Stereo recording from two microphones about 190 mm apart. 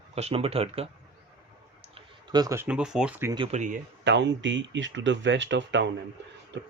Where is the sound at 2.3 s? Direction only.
20° right (ahead or behind).